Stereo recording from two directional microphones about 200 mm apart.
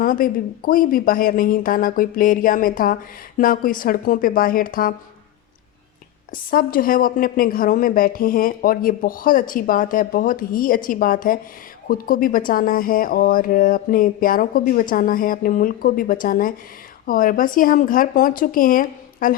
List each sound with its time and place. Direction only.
0.0 s a woman's voice: 45° left (ahead or behind)
6.3 s a woman's voice: 45° left (ahead or behind)